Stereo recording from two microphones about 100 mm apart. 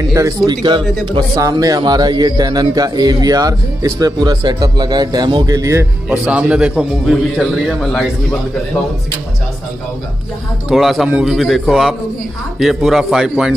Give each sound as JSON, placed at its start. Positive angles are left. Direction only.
{"t": 0.5, "sound": "a man's voice", "side_deg": -50}
{"t": 1.5, "sound": "a man's voice", "side_deg": -40}
{"t": 6.1, "sound": "a man's voice", "side_deg": -15}
{"t": 10.7, "sound": "a man's voice", "side_deg": 0}
{"t": 11.3, "sound": "a man's voice", "side_deg": 0}